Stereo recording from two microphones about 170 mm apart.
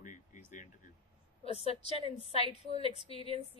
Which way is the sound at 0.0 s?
50° left (ahead or behind).